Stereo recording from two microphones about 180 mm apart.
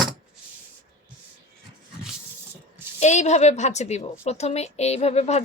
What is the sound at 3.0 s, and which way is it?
A woman's voice, 40° left (ahead or behind).